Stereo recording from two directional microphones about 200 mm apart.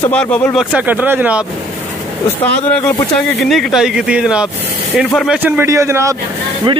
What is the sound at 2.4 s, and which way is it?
Speech, 10° left (ahead or behind).